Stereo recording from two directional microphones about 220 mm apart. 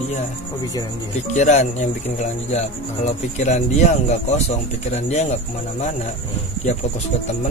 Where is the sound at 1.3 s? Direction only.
30° left (ahead or behind).